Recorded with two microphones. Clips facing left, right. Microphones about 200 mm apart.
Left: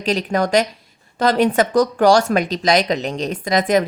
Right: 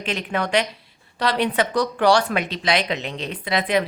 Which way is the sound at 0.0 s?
40° left (ahead or behind).